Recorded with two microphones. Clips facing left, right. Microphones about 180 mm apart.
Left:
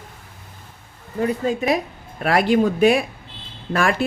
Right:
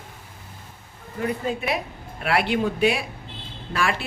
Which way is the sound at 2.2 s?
40° left (ahead or behind).